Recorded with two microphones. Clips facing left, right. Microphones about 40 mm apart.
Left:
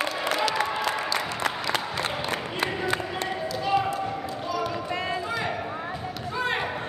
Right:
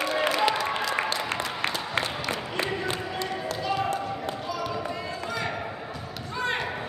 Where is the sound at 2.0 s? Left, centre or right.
Left.